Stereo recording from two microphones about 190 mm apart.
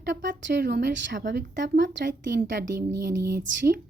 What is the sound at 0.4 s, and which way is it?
Speech, 60° right (ahead or behind).